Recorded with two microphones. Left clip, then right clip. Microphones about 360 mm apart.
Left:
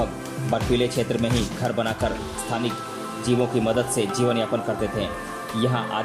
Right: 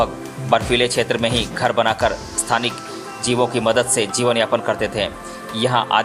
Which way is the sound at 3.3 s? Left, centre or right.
Centre.